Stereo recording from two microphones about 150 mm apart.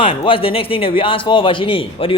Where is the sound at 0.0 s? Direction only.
35° left (ahead or behind).